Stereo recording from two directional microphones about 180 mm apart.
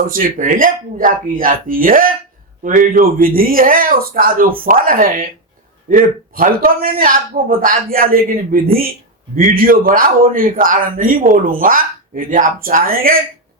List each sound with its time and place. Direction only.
0.1 s a man's voice: 50° right (ahead or behind)